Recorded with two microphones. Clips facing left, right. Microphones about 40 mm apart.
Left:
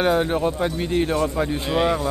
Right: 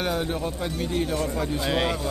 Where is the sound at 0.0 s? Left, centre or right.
Left.